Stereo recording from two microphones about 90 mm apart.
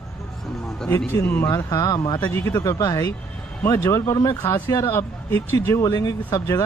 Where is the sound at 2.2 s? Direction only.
25° left (ahead or behind).